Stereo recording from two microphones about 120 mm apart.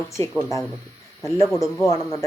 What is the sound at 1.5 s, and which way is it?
Speech, 30° left (ahead or behind).